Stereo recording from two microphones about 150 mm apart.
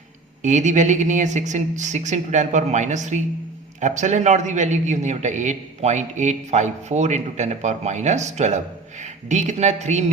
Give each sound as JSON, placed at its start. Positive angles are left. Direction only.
{"t": 0.4, "sound": "a man's voice", "side_deg": -55}